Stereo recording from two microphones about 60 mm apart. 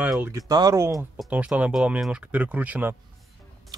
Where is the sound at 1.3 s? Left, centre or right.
Right.